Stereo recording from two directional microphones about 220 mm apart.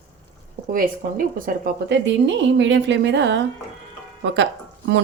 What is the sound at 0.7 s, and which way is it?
A woman's voice, 40° right (ahead or behind).